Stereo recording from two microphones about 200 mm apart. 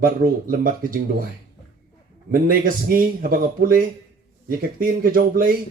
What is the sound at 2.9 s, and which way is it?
Speech, 45° right (ahead or behind).